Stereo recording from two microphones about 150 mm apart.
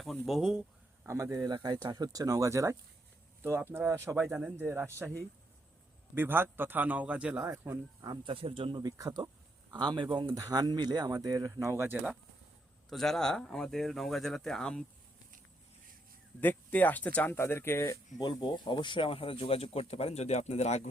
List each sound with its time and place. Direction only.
0.0 s speech: centre (ahead or behind)
1.0 s a man's voice: 20° right (ahead or behind)
6.1 s a man's voice: 15° right (ahead or behind)
8.1 s speech: 35° right (ahead or behind); by 12.1 s 10° right (ahead or behind)
12.9 s speech: centre (ahead or behind)
16.4 s speech: 10° left (ahead or behind)
18.2 s speech: 30° left (ahead or behind); by 20.9 s 50° left (ahead or behind)